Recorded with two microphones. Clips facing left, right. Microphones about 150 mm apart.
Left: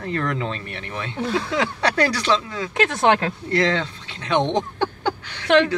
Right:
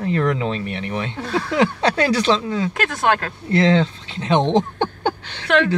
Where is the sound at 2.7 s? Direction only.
25° left (ahead or behind).